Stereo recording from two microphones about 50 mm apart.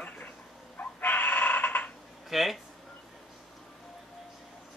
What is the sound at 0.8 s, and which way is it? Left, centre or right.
Chicken, left.